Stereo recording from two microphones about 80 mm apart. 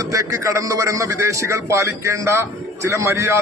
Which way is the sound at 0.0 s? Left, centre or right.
Right.